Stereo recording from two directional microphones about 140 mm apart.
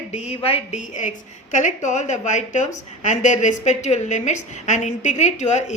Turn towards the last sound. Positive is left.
turn(degrees=55)  # may be behind; listen again after turning